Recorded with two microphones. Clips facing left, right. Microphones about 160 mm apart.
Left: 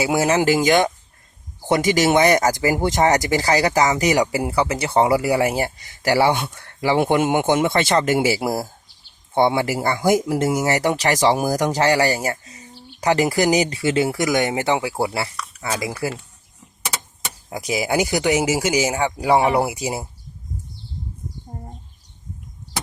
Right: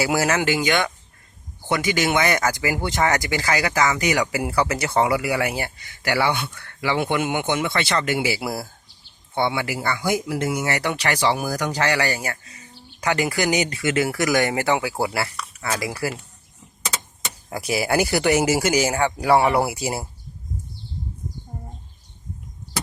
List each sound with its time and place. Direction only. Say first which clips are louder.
0.0 s speech: left 3 dB; 25° left (ahead or behind)
17.2 s speech: even; 15° left (ahead or behind)